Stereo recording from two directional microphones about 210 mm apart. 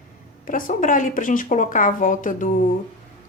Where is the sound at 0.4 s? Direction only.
40° left (ahead or behind).